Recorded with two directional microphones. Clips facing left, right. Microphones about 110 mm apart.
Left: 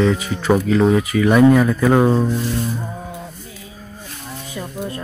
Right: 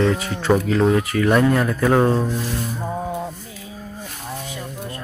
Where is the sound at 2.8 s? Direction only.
45° right (ahead or behind).